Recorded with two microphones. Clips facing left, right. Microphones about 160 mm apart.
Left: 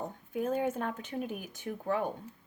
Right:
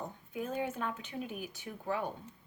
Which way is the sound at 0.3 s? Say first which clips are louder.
Left 5 dB; 45° left (ahead or behind).